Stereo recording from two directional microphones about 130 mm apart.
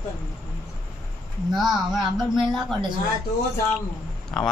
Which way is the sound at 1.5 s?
Centre (ahead or behind).